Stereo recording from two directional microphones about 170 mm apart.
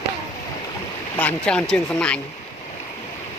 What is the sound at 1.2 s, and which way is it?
Speech, 10° left (ahead or behind).